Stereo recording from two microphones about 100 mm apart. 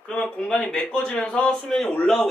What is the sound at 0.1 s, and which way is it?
A man's voice, 10° left (ahead or behind).